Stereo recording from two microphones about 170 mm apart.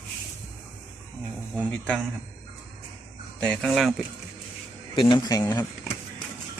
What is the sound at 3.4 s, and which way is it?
Speech, centre (ahead or behind).